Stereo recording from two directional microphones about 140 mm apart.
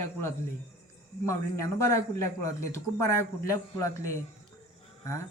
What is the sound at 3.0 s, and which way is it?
A man's voice, 20° left (ahead or behind).